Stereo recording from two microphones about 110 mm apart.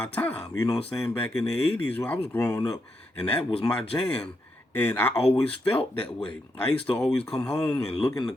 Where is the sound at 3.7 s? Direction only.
10° left (ahead or behind).